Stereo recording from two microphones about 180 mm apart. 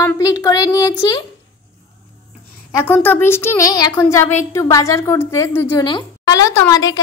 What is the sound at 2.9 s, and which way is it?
A woman's voice, 10° left (ahead or behind).